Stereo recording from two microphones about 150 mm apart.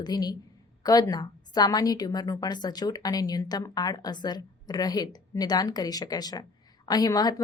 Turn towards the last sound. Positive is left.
turn(degrees=25)  # may be behind; listen again after turning